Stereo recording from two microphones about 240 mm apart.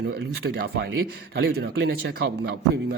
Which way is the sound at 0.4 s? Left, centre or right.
Right.